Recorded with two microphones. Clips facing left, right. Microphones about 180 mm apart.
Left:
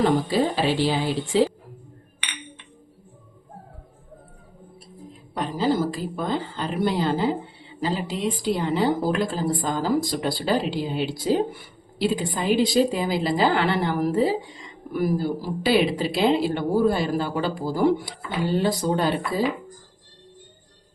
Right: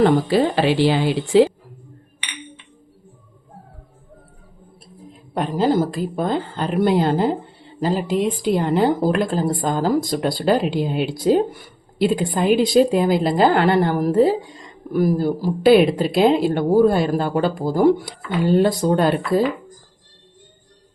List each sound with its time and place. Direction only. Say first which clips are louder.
0.0 s a woman's voice: right 5 dB; 65° right (ahead or behind)
5.3 s a woman's voice: right 5 dB; 55° right (ahead or behind)